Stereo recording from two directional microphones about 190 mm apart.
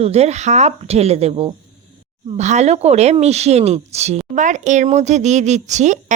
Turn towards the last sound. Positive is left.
turn(degrees=-40)  # may be behind; listen again after turning